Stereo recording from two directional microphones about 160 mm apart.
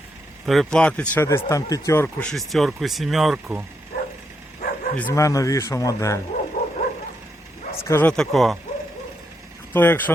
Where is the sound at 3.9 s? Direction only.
70° left (ahead or behind).